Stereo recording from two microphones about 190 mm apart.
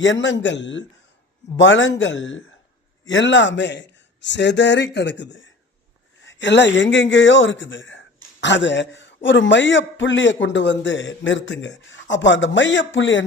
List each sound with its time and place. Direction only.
0.0 s a man's voice: 75° left (ahead or behind)